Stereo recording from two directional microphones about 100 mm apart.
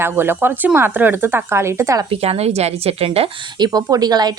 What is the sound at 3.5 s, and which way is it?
Speech, 40° right (ahead or behind).